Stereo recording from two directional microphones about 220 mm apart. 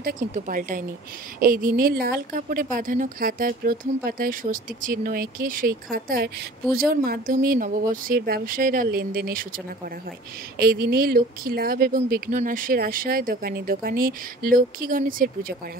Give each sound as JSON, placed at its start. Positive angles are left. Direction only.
{"t": 0.0, "sound": "a woman's voice", "side_deg": -40}
{"t": 10.6, "sound": "a woman's voice", "side_deg": -45}